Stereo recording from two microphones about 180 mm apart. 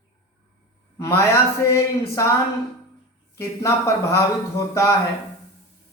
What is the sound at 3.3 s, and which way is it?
Speech, 15° left (ahead or behind).